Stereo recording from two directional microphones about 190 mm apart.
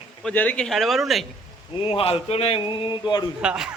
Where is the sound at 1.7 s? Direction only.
30° left (ahead or behind).